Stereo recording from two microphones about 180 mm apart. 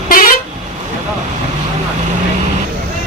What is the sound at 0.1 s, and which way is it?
Vehicle, 50° left (ahead or behind).